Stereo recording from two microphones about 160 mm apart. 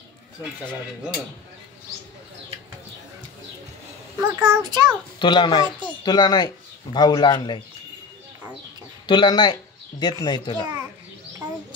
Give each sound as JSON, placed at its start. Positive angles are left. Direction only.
{"t": 4.2, "sound": "a child's voice", "side_deg": -25}
{"t": 5.2, "sound": "speech", "side_deg": 30}
{"t": 9.0, "sound": "speech", "side_deg": 30}